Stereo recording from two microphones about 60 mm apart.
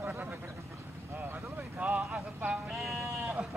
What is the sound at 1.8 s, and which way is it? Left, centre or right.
Vehicle, right.